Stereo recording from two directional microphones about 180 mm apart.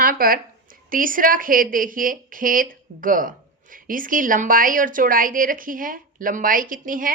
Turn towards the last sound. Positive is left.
turn(degrees=-50)  # may be behind; listen again after turning